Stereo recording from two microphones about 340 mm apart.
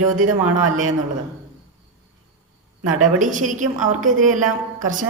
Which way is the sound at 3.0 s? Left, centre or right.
Right.